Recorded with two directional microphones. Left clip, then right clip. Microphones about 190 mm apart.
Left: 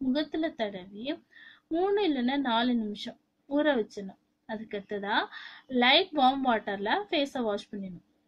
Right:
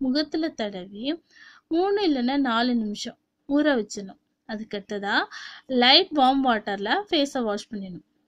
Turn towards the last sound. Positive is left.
turn(degrees=-40)  # may be behind; listen again after turning